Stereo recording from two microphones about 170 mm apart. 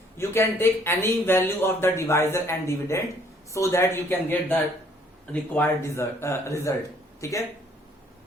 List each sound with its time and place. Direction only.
0.2 s speech: 15° left (ahead or behind)